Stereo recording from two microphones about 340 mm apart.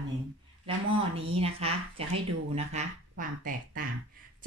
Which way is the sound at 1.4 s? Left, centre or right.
Centre.